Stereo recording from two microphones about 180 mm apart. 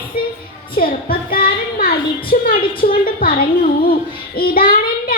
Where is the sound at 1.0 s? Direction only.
55° left (ahead or behind).